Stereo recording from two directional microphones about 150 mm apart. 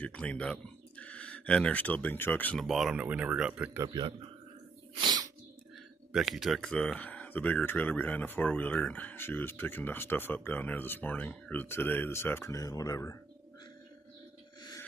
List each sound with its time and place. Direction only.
0.0 s speech: 10° left (ahead or behind)
2.6 s speech: centre (ahead or behind)
3.8 s speech: 30° right (ahead or behind)
5.0 s a sound: 25° right (ahead or behind)
6.1 s speech: centre (ahead or behind); by 13.2 s 20° left (ahead or behind)